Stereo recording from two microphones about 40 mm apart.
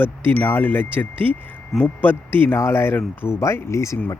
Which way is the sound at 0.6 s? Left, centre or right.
Left.